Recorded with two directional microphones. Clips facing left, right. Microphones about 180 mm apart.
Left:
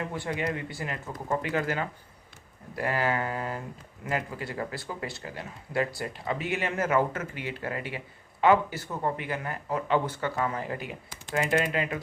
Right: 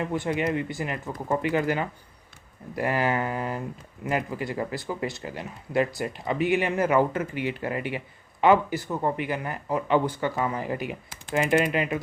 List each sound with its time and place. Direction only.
0.1 s speech: 20° right (ahead or behind)